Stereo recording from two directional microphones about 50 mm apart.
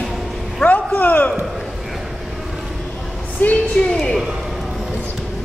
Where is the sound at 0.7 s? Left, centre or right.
Left.